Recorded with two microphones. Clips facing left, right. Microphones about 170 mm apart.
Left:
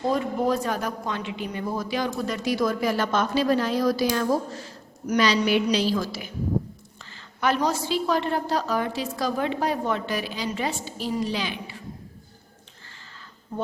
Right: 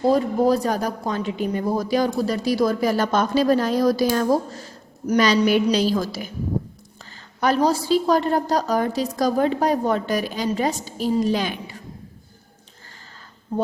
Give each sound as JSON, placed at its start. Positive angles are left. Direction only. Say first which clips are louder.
{"t": 0.0, "sound": "speech", "louder": "right 6 dB", "side_deg": -35}
{"t": 7.0, "sound": "a sound", "louder": "right 3 dB", "side_deg": -40}
{"t": 7.9, "sound": "a woman's voice", "louder": "right 6 dB", "side_deg": -40}